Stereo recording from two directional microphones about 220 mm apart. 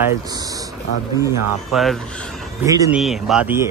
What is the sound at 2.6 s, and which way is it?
Speech, 15° right (ahead or behind).